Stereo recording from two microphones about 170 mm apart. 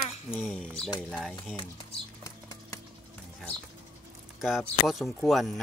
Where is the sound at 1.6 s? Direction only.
25° left (ahead or behind).